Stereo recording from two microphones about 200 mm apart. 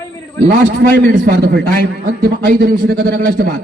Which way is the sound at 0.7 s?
60° right (ahead or behind).